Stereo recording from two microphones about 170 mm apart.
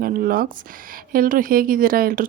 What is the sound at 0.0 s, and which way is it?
A woman's voice, 55° right (ahead or behind).